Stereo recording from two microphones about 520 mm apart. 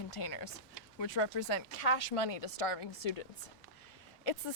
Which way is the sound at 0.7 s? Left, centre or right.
Left.